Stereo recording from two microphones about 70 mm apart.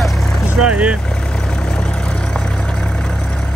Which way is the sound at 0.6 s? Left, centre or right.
Centre.